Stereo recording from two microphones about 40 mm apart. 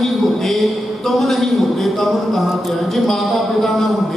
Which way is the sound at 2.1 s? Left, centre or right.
Centre.